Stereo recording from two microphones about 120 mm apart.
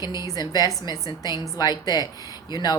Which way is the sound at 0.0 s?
25° right (ahead or behind).